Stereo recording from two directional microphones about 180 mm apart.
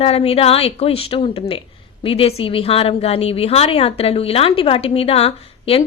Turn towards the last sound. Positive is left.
turn(degrees=35)  # may be behind; listen again after turning